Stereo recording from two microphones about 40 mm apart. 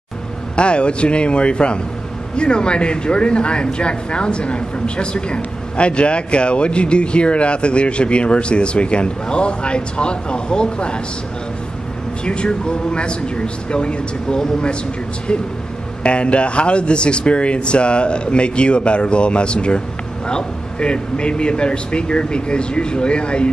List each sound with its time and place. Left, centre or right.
0.6 s speech: left
12.3 s speech: left
16.0 s speech: left